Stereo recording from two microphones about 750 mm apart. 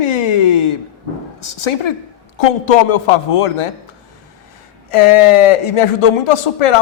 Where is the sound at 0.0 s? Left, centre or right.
Left.